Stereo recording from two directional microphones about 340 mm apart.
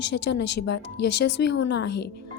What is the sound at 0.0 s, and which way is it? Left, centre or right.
Speech, left.